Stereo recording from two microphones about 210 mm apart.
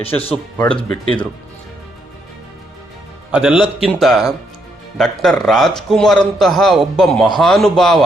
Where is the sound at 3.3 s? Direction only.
5° right (ahead or behind).